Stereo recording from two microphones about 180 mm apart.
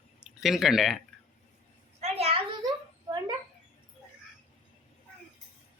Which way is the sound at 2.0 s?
35° right (ahead or behind).